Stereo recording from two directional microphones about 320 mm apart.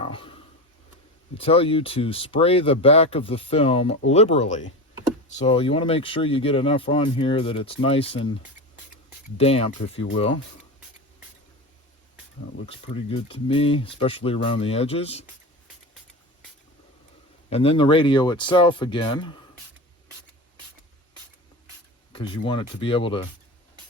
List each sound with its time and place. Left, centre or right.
0.0 s a sound: centre
1.4 s speech: centre
9.4 s speech: centre
12.8 s speech: centre
17.5 s speech: centre
22.1 s speech: centre